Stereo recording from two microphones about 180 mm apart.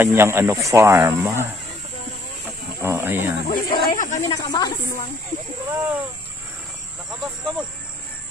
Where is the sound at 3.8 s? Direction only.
45° left (ahead or behind).